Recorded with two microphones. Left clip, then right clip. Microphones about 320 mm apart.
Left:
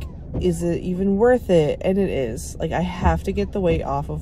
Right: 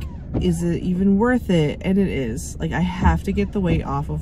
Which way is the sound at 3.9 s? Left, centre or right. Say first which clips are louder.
Left 1 dB; left.